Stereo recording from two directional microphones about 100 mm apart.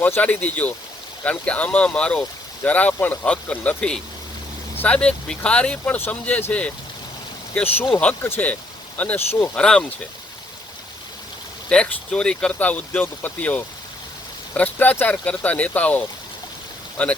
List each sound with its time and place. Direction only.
0.0 s speech: 15° left (ahead or behind)
7.5 s speech: 20° left (ahead or behind)
9.6 s speech: 5° left (ahead or behind)
11.7 s speech: 10° left (ahead or behind)